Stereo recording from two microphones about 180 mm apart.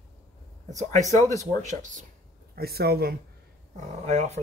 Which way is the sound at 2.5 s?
60° right (ahead or behind).